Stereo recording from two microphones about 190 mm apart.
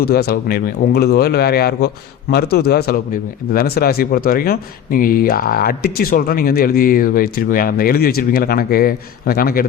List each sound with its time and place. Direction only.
0.0 s a man's voice: 55° left (ahead or behind)